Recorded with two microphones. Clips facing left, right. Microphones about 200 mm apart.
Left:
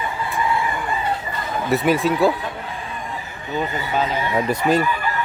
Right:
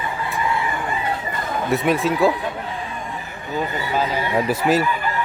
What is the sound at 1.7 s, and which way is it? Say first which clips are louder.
Speech: left 1 dB; centre (ahead or behind).